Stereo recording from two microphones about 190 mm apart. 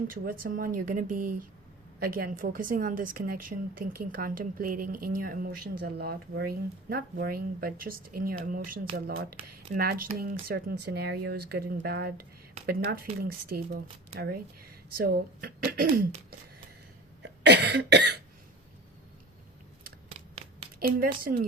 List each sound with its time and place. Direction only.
0.1 s a woman's voice: 45° right (ahead or behind)
14.9 s a woman's voice: 55° right (ahead or behind)
17.4 s speech: 65° right (ahead or behind)
20.7 s a woman's voice: 50° right (ahead or behind)